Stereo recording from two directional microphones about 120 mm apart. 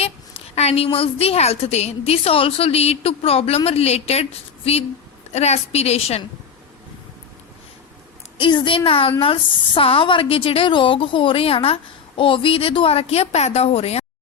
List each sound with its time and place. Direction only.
0.0 s a woman's voice: 60° left (ahead or behind)
8.4 s a woman's voice: 45° left (ahead or behind); by 14.0 s 60° left (ahead or behind)